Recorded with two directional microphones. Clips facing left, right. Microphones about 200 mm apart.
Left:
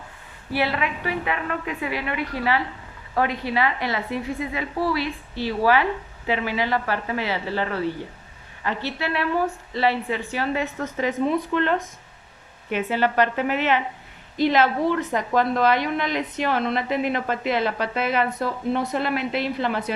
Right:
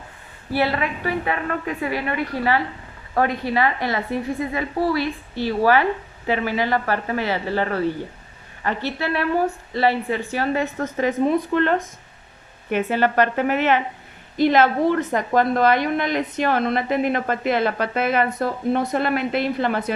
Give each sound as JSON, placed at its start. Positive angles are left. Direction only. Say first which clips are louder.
{"t": 0.5, "sound": "a woman's voice", "louder": "right 3 dB", "side_deg": -40}